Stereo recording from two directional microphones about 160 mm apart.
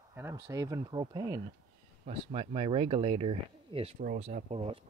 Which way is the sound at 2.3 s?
35° right (ahead or behind).